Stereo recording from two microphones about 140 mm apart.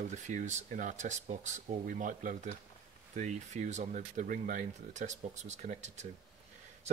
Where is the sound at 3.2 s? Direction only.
55° right (ahead or behind).